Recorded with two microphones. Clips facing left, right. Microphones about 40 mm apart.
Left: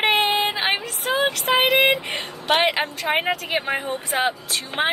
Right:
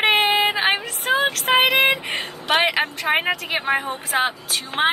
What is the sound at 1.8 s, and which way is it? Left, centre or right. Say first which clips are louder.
Music: even; centre.